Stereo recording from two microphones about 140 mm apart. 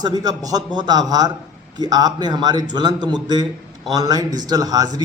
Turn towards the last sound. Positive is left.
turn(degrees=-30)  # may be behind; listen again after turning